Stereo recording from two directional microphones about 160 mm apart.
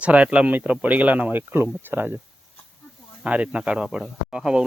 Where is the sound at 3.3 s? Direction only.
10° right (ahead or behind).